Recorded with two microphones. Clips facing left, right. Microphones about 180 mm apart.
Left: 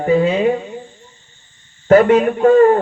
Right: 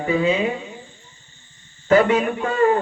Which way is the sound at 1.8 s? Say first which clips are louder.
Left 6 dB; 50° left (ahead or behind).